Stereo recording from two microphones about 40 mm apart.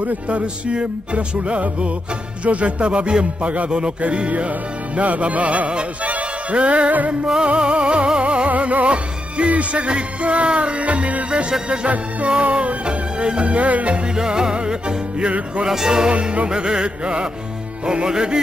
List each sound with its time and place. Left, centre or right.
0.0 s music: right
7.4 s music: right
8.5 s music: right
11.2 s music: right
14.1 s music: centre
15.6 s music: centre
16.1 s music: right